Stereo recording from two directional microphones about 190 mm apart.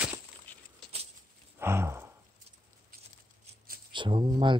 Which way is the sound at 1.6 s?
15° right (ahead or behind).